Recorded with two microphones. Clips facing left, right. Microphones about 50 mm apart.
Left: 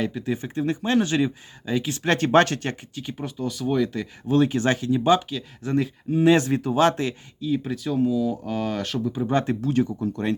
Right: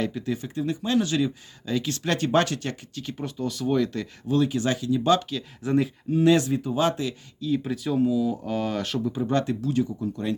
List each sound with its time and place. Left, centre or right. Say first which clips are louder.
0.0 s speech: left 1 dB; centre
0.4 s speech: left 5 dB; left
1.6 s speech: left 2 dB; left
2.0 s speech: left 5 dB; left
2.9 s speech: left 1 dB; centre
4.3 s speech: left 3 dB; left
5.3 s speech: right 1 dB; centre
6.1 s speech: left 2 dB; left
6.5 s speech: left 4 dB; left
6.9 s speech: left 3 dB; left
7.4 s speech: left 1 dB; centre
9.4 s speech: left 2 dB; left
10.0 s speech: left 3 dB; left